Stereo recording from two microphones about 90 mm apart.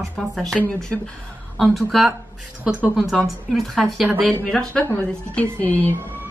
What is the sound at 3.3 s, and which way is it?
Speech, centre (ahead or behind).